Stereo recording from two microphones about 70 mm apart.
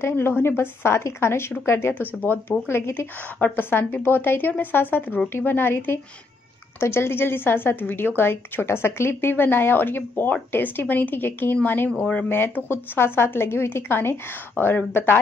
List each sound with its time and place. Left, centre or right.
0.0 s a woman's voice: left
11.9 s speech: centre
12.3 s a woman's voice: left